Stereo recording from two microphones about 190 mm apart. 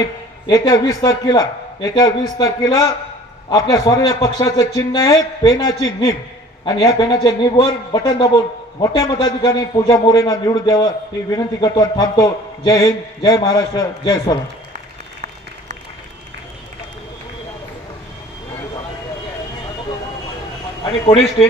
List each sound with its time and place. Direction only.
0.5 s a man's voice: 20° left (ahead or behind)